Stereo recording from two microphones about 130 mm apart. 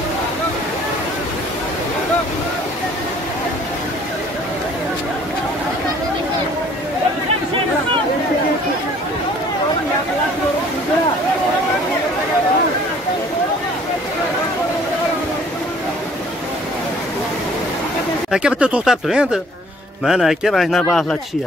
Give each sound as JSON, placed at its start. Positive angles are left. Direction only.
{"t": 18.3, "sound": "speech", "side_deg": -10}